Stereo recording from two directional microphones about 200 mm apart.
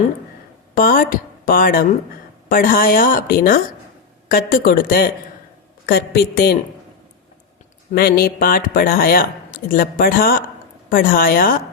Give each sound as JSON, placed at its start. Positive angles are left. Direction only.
{"t": 0.8, "sound": "speech", "side_deg": 45}
{"t": 7.9, "sound": "speech", "side_deg": 45}